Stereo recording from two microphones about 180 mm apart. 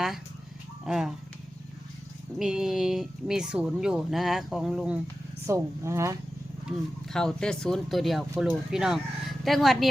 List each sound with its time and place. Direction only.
0.9 s speech: centre (ahead or behind)
2.4 s speech: centre (ahead or behind)
5.5 s speech: 15° right (ahead or behind)
6.7 s speech: centre (ahead or behind)